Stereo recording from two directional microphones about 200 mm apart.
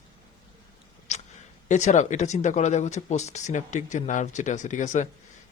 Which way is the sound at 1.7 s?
35° left (ahead or behind).